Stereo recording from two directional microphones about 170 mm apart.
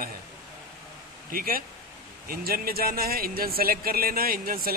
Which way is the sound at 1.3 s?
55° right (ahead or behind).